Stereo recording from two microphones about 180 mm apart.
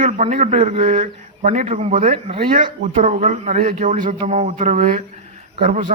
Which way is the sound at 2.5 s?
45° right (ahead or behind).